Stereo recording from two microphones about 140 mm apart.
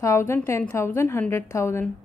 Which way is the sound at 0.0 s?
20° left (ahead or behind).